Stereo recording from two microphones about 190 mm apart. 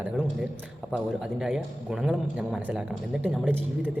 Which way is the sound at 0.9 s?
5° right (ahead or behind).